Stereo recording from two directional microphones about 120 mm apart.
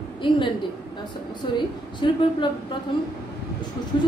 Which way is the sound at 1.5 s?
40° left (ahead or behind).